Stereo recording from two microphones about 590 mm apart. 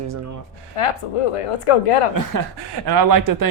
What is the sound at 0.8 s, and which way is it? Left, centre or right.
Speech, left.